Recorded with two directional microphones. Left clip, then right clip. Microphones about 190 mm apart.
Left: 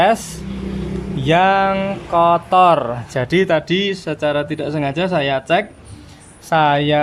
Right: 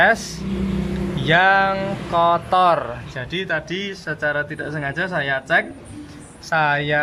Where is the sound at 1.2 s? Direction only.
15° left (ahead or behind).